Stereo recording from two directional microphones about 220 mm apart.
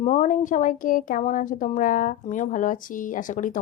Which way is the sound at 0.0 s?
35° left (ahead or behind).